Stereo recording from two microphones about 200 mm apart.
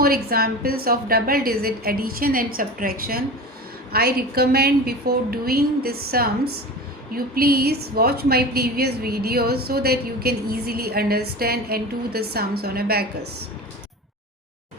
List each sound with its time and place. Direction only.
0.0 s a woman's voice: 50° right (ahead or behind)